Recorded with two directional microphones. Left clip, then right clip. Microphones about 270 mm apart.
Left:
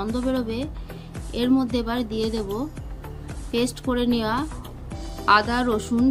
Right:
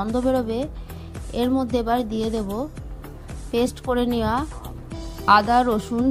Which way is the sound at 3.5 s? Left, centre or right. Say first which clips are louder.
Right 2 dB; right.